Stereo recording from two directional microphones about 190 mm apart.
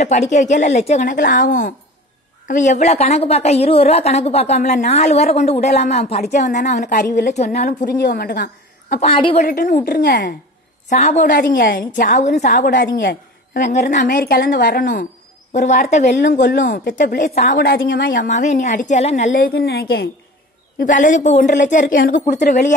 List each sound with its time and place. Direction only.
0.0 s a woman's voice: 35° left (ahead or behind)
7.8 s a woman's voice: 60° left (ahead or behind)
9.1 s a woman's voice: 25° left (ahead or behind)
9.4 s a woman's voice: 50° left (ahead or behind)
10.9 s a woman's voice: 35° left (ahead or behind)
13.7 s a woman's voice: 40° left (ahead or behind)
17.2 s a woman's voice: 40° left (ahead or behind)
17.6 s a woman's voice: 55° left (ahead or behind)
20.8 s a woman's voice: 40° left (ahead or behind)